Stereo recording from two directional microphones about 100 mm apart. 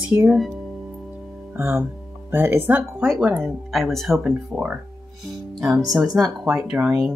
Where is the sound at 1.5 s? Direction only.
25° right (ahead or behind).